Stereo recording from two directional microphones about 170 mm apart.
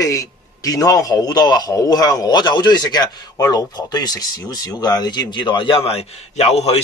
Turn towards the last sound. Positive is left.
turn(degrees=35)  # may be behind; listen again after turning